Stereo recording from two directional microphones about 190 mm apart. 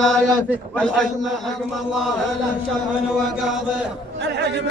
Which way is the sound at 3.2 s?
Centre (ahead or behind).